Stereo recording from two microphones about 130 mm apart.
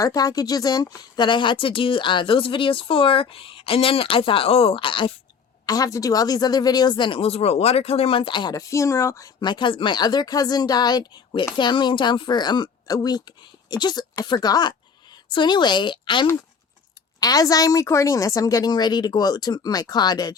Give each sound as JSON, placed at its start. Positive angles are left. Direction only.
{"t": 0.0, "sound": "speech", "side_deg": 30}
{"t": 5.6, "sound": "speech", "side_deg": 30}